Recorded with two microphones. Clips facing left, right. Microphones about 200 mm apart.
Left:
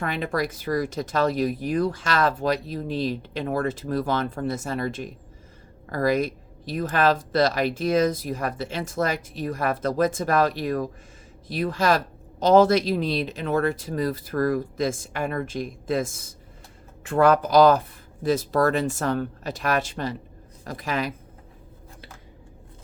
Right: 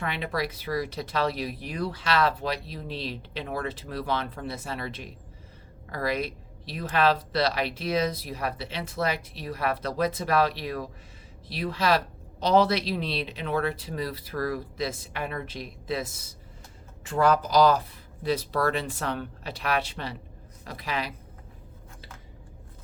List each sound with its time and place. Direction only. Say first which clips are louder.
0.0 s speech: left 4 dB; 45° left (ahead or behind)